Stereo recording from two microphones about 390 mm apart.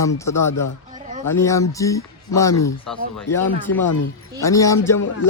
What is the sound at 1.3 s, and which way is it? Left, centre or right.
A woman's voice, centre.